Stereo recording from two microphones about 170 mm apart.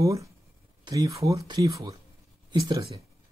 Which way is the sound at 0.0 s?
20° right (ahead or behind).